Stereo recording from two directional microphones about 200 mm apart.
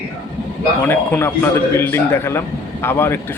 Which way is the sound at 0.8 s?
10° left (ahead or behind).